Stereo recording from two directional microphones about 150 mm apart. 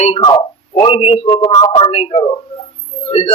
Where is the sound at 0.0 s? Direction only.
40° left (ahead or behind).